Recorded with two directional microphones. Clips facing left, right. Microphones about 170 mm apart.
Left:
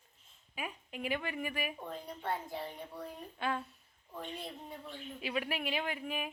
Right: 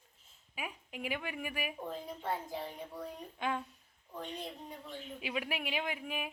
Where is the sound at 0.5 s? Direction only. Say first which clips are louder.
Left 1 dB; 10° right (ahead or behind).